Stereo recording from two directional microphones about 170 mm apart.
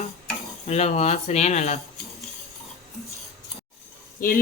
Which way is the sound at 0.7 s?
40° left (ahead or behind).